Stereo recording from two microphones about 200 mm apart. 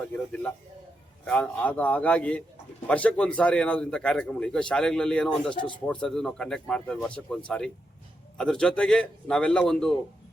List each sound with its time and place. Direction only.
1.2 s a man's voice: 5° left (ahead or behind)